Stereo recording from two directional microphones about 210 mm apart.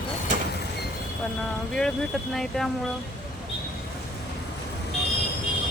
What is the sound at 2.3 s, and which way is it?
Speech, centre (ahead or behind).